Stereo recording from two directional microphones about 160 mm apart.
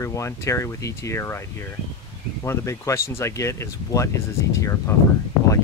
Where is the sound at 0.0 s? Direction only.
20° left (ahead or behind).